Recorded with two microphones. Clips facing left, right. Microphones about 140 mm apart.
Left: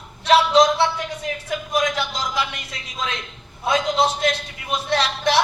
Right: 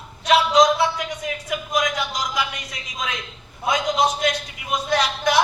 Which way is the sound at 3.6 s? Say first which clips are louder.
Left 1 dB; 30° left (ahead or behind).